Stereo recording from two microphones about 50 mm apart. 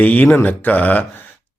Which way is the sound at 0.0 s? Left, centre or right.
Left.